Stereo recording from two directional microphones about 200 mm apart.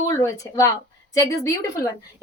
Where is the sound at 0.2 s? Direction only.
15° left (ahead or behind).